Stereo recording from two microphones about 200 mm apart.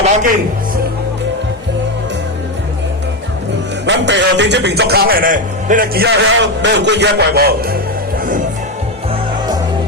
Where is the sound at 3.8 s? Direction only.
60° right (ahead or behind).